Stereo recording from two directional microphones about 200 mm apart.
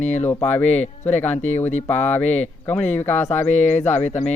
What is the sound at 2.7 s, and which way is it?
Speech, 10° left (ahead or behind).